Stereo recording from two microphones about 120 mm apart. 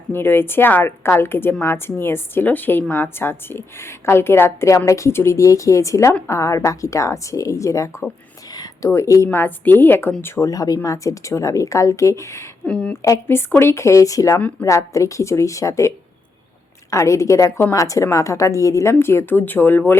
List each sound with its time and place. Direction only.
0.1 s a woman's voice: 20° left (ahead or behind)
8.5 s a sound: 35° left (ahead or behind)
8.9 s a woman's voice: 25° left (ahead or behind)
12.6 s a woman's voice: 5° left (ahead or behind)
12.9 s a woman's voice: 25° left (ahead or behind)
16.9 s a woman's voice: 25° left (ahead or behind)